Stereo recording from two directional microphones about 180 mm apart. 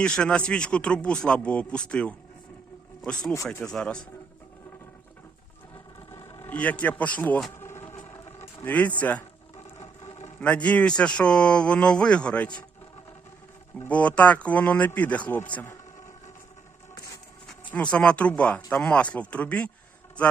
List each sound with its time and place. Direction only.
0.0 s speech: 5° left (ahead or behind)
6.1 s vehicle: 15° left (ahead or behind)
8.6 s speech: 10° left (ahead or behind)
10.4 s speech: 5° left (ahead or behind)
13.7 s speech: 10° left (ahead or behind)
17.7 s speech: 5° left (ahead or behind)